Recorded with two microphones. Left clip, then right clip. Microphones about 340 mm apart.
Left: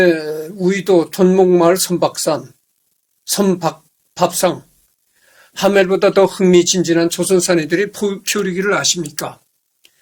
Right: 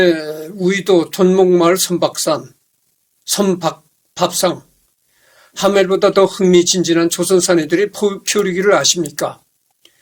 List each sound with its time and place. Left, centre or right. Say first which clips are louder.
0.0 s speech: even; centre; by 9.3 s left